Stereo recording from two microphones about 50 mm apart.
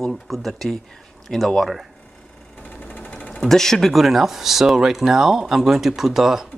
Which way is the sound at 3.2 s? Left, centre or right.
Centre.